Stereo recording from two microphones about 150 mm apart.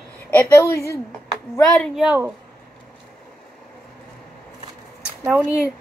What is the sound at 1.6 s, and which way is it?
Speech, 5° left (ahead or behind).